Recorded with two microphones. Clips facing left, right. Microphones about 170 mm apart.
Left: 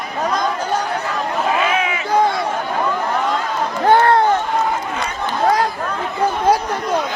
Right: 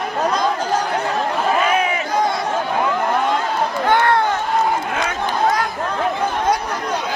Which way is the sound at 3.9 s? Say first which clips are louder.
Left 4 dB; 35° left (ahead or behind).